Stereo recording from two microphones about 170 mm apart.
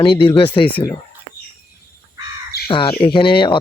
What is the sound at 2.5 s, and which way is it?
Crow, 70° left (ahead or behind).